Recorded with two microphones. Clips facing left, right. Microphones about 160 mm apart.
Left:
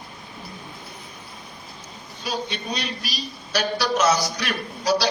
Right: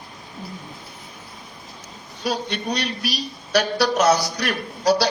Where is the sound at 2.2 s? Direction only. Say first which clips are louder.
Right 4 dB; 65° right (ahead or behind).